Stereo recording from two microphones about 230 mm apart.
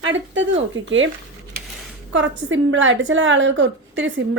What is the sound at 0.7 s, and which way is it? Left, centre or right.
Speech, right.